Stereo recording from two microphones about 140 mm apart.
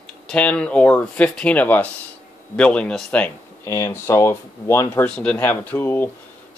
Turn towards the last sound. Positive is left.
turn(degrees=15)  # may be behind; listen again after turning